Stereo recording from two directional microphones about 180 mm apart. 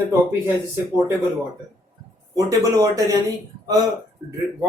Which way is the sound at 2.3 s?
20° right (ahead or behind).